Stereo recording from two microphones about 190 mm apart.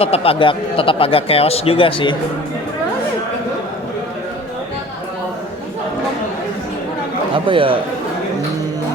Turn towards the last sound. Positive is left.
turn(degrees=-25)  # may be behind; listen again after turning